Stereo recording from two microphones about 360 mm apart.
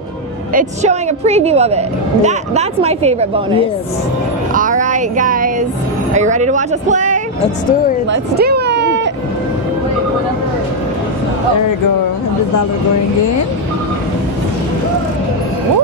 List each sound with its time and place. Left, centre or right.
0.6 s speech: centre
4.6 s child singing: right
6.1 s speech: centre
8.1 s a sound: right